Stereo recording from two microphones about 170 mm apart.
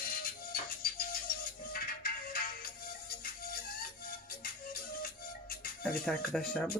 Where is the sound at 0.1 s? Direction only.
60° left (ahead or behind).